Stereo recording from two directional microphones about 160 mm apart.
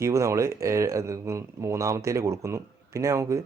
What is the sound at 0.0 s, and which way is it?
Speech, 20° right (ahead or behind).